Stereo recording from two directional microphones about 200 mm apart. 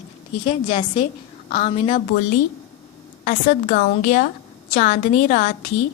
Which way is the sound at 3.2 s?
45° left (ahead or behind).